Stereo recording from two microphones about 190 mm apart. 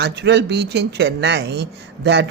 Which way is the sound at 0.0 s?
65° right (ahead or behind).